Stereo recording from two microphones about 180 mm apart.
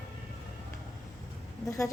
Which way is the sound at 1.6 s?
15° left (ahead or behind).